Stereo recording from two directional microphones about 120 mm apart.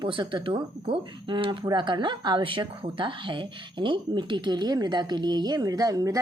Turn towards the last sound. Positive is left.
turn(degrees=-30)  # may be behind; listen again after turning